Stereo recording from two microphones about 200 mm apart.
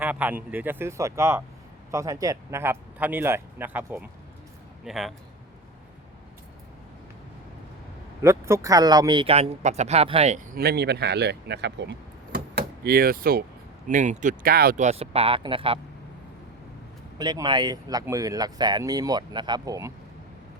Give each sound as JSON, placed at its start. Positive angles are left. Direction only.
{"t": 0.0, "sound": "speech", "side_deg": -10}
{"t": 8.2, "sound": "speech", "side_deg": -15}
{"t": 10.6, "sound": "speech", "side_deg": -55}
{"t": 17.2, "sound": "speech", "side_deg": -20}